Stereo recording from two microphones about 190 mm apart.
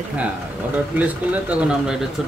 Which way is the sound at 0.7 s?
10° right (ahead or behind).